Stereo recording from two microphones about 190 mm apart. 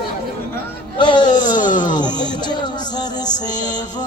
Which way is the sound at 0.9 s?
25° left (ahead or behind).